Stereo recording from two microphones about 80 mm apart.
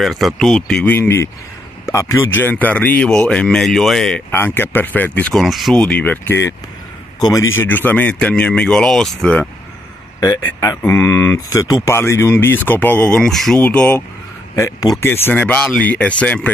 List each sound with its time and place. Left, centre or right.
0.0 s speech: centre
0.8 s speech: left; by 4.2 s centre
4.3 s speech: left
5.3 s speech: centre
5.8 s speech: centre
7.5 s speech: left; by 9.2 s centre
9.2 s speech: centre
10.6 s speech: left
11.4 s speech: left
14.5 s speech: left
15.0 s speech: left